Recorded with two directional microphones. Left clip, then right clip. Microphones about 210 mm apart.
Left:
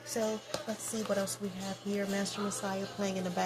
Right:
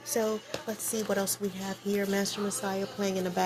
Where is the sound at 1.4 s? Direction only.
50° right (ahead or behind).